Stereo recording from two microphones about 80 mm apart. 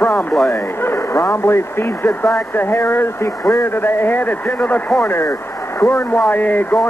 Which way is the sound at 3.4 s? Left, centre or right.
Left.